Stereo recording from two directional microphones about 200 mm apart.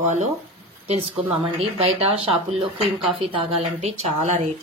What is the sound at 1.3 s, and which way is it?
Speech, 30° right (ahead or behind).